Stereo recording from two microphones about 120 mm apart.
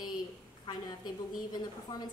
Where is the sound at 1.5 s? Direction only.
35° left (ahead or behind).